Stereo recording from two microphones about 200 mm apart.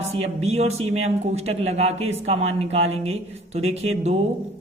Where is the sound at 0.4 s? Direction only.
30° right (ahead or behind).